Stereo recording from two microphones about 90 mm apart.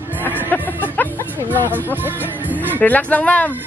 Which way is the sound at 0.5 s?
20° left (ahead or behind).